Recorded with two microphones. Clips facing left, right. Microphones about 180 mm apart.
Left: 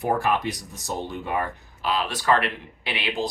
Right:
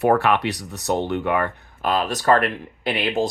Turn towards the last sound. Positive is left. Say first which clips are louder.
# right 6 dB
turn(degrees=-45)  # may be behind; listen again after turning